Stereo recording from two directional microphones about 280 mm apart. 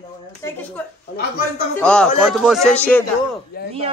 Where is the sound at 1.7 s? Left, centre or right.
Centre.